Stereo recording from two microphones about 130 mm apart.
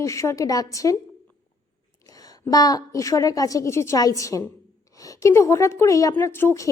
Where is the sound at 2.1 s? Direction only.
30° left (ahead or behind).